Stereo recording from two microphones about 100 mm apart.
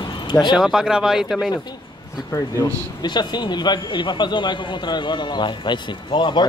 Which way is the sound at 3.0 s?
50° left (ahead or behind).